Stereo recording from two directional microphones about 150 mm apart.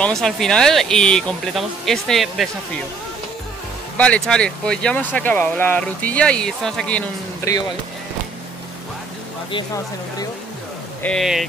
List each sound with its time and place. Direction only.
0.0 s speech: 5° left (ahead or behind)
3.9 s speech: 10° left (ahead or behind)
7.5 s speech: 20° left (ahead or behind)
11.0 s speech: 5° left (ahead or behind)